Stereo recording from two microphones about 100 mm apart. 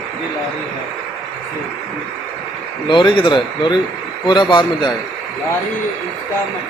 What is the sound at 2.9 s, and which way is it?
Speech, 50° left (ahead or behind).